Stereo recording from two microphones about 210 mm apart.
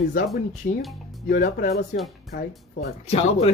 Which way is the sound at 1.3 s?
45° left (ahead or behind).